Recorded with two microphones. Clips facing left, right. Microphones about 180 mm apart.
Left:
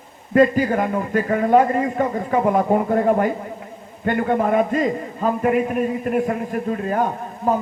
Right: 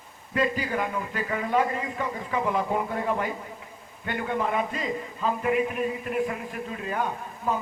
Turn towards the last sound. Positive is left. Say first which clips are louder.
# left 8 dB
turn(degrees=45)  # may be behind; listen again after turning